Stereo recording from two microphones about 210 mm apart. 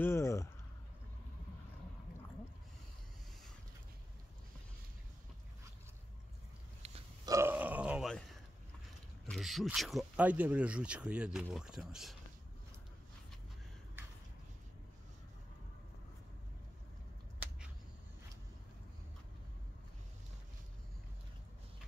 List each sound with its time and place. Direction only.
0.0 s a sound: 10° left (ahead or behind)
6.8 s burping: 30° right (ahead or behind)
7.2 s burping: 10° right (ahead or behind)
9.2 s speech: centre (ahead or behind)